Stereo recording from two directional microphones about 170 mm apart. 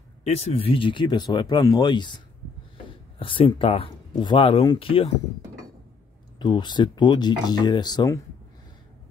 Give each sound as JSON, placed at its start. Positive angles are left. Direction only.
{"t": 0.2, "sound": "speech", "side_deg": 35}
{"t": 6.4, "sound": "speech", "side_deg": 25}